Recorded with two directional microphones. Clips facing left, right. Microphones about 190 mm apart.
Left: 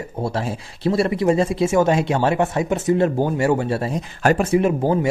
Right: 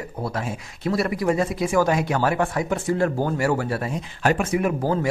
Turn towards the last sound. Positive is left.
turn(degrees=20)  # may be behind; listen again after turning